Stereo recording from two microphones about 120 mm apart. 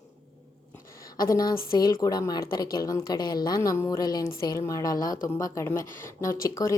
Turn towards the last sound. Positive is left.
turn(degrees=25)  # may be behind; listen again after turning